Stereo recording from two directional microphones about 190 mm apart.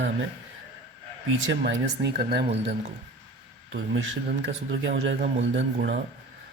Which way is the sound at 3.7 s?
75° right (ahead or behind).